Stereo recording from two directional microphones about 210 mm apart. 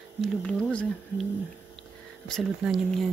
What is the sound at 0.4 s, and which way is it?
Speech, 5° left (ahead or behind).